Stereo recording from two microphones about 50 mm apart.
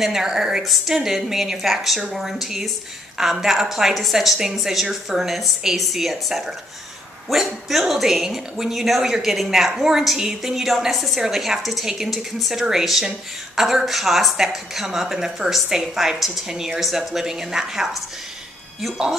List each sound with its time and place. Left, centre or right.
0.0 s a woman's voice: centre